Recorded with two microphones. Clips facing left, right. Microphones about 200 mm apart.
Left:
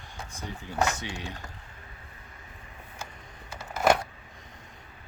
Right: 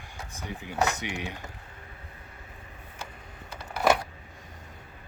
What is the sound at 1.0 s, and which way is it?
Speech, 15° right (ahead or behind).